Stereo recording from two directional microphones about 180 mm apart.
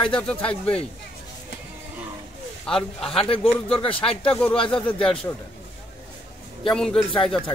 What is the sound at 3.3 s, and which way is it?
Speech, 30° left (ahead or behind).